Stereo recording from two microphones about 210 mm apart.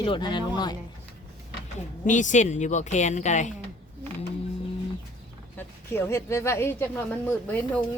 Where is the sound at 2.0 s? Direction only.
35° left (ahead or behind).